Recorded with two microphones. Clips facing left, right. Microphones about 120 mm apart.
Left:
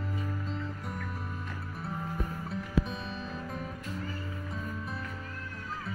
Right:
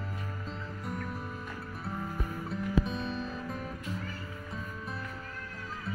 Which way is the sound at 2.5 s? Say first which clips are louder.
Right 2 dB; centre (ahead or behind).